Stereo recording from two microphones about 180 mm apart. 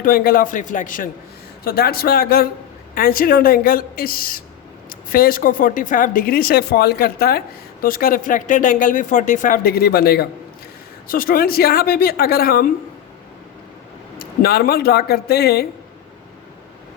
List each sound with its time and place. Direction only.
0.0 s a woman's voice: 55° left (ahead or behind)
14.2 s a woman's voice: 60° left (ahead or behind)